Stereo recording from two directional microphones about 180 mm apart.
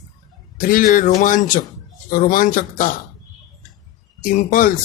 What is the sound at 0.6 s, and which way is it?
Speech, 50° left (ahead or behind).